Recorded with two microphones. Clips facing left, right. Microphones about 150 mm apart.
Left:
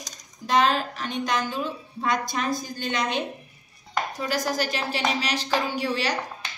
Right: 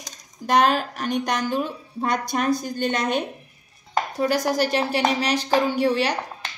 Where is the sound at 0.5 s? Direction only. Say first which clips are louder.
Right 3 dB; 50° right (ahead or behind).